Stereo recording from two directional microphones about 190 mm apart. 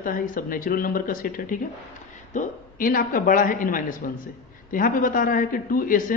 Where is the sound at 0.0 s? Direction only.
45° left (ahead or behind).